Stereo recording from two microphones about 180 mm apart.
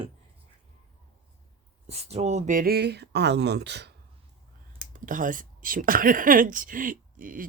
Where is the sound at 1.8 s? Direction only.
35° right (ahead or behind); by 3.9 s 70° right (ahead or behind).